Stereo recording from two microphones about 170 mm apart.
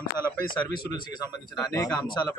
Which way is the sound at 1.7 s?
20° left (ahead or behind).